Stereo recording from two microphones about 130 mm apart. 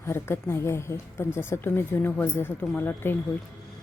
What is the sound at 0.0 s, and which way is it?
Speech, 20° left (ahead or behind).